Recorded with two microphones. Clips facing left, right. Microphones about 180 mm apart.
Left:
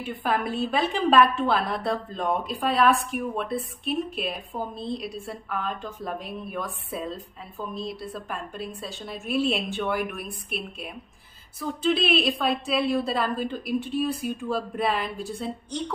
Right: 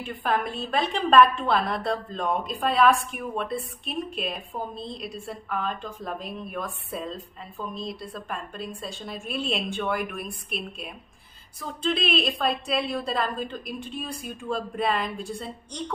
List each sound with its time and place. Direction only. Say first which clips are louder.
0.0 s a woman's voice: even; 5° left (ahead or behind)